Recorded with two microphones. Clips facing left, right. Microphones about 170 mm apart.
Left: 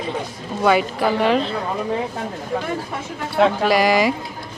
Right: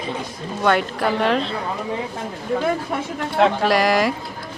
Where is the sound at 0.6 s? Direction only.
5° left (ahead or behind).